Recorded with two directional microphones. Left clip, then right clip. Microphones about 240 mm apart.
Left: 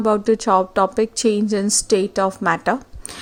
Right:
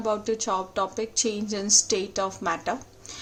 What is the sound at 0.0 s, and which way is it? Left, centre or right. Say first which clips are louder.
A woman's voice: left 9 dB; left.